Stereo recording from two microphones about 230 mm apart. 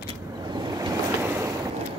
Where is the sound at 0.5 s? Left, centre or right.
Centre.